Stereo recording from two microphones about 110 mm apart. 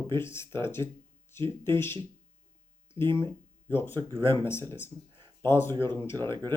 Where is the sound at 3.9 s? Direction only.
50° right (ahead or behind).